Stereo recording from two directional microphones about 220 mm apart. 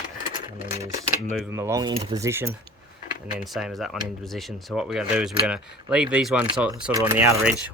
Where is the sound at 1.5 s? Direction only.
15° right (ahead or behind).